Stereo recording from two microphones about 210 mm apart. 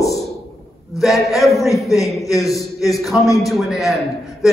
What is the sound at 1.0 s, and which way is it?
A man's voice, centre (ahead or behind).